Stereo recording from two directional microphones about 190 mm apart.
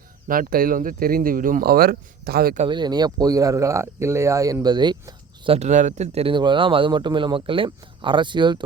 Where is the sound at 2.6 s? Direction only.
25° right (ahead or behind).